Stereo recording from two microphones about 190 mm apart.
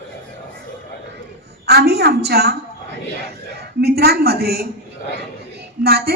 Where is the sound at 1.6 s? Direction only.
60° right (ahead or behind).